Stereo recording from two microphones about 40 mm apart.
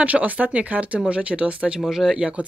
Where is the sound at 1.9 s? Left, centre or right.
Centre.